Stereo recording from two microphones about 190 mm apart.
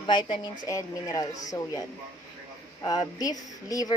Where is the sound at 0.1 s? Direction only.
25° left (ahead or behind).